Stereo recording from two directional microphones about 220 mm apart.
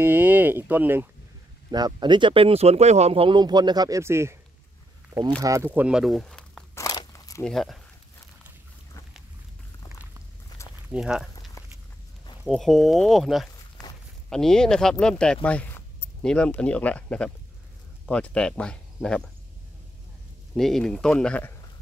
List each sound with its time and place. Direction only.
0.0 s speech: 10° right (ahead or behind)
5.4 s speech: 15° right (ahead or behind)
6.7 s crunch: 15° left (ahead or behind)
7.4 s speech: centre (ahead or behind)
10.9 s speech: 5° right (ahead or behind)
11.6 s walk: 15° left (ahead or behind)
12.4 s speech: centre (ahead or behind)
13.8 s walk: centre (ahead or behind)
14.3 s speech: centre (ahead or behind)
20.5 s speech: centre (ahead or behind)